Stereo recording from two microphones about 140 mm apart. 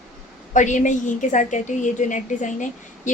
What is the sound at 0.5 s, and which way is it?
A woman's voice, 60° left (ahead or behind).